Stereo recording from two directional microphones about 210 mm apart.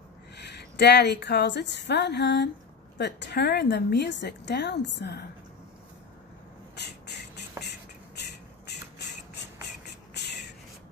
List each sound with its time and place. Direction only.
0.4 s a woman's voice: 55° left (ahead or behind)
6.7 s beatboxing: 55° left (ahead or behind)
8.2 s a sound: 50° left (ahead or behind)